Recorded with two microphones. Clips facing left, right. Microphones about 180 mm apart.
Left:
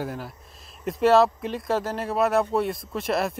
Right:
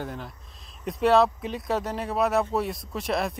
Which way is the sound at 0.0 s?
5° left (ahead or behind).